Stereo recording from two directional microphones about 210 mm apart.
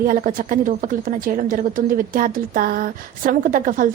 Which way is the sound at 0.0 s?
40° right (ahead or behind).